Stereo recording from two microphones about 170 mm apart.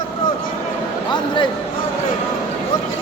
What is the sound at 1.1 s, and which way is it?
Speech, 25° left (ahead or behind).